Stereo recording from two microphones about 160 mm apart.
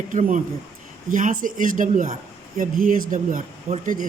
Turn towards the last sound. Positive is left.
turn(degrees=-55)  # may be behind; listen again after turning